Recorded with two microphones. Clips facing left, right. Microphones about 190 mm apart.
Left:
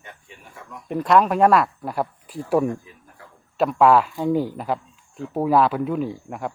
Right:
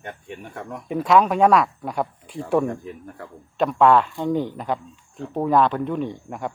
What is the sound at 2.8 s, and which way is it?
Speech, 60° right (ahead or behind).